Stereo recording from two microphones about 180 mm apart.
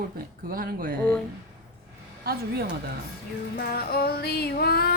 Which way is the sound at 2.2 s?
60° right (ahead or behind).